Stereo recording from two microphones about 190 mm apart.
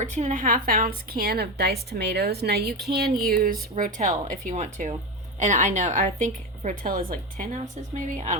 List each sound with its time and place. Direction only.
0.0 s a woman's voice: 40° right (ahead or behind)